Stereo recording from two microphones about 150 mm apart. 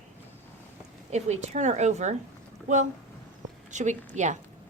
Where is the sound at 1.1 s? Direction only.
50° right (ahead or behind).